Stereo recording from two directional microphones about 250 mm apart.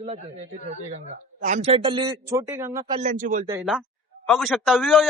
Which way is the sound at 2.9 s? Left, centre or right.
Right.